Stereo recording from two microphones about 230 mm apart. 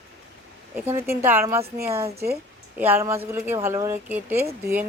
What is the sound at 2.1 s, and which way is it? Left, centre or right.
Speech, right.